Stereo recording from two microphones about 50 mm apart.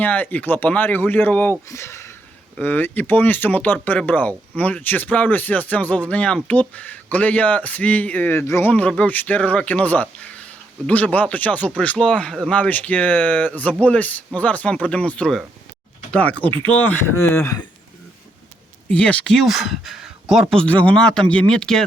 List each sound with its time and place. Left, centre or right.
0.0 s speech: left
1.7 s a sound: left
2.6 s speech: left
11.9 s speech: centre; by 17.0 s left
17.2 s speech: left
18.9 s speech: left
19.5 s speech: centre
20.7 s speech: left
20.9 s speech: centre